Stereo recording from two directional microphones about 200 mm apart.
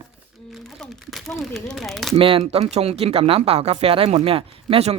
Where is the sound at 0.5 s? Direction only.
Centre (ahead or behind).